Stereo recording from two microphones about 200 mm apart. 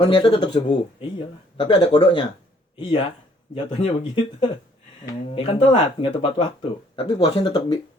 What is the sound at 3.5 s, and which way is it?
Speech, 25° left (ahead or behind).